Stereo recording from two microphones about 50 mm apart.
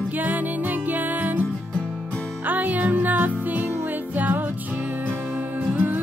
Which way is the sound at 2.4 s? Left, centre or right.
Right.